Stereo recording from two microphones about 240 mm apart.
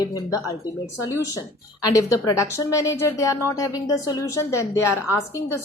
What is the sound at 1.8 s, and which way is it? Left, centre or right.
A woman's voice, centre.